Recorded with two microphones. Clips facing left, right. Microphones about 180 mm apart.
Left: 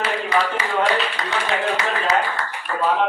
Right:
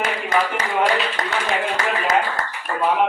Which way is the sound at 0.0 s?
45° right (ahead or behind).